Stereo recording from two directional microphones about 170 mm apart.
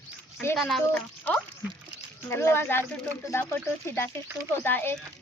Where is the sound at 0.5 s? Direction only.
Centre (ahead or behind).